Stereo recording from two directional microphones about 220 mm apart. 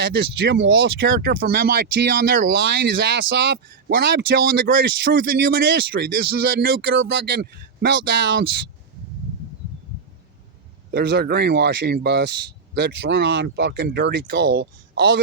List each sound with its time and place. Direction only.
0.1 s speech: 50° right (ahead or behind)
2.4 s speech: 55° right (ahead or behind)
10.9 s speech: 45° right (ahead or behind)